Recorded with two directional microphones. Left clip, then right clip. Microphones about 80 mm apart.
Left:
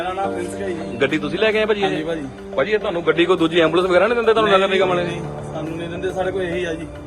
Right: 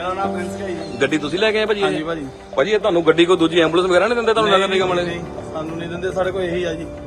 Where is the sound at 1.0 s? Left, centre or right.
Right.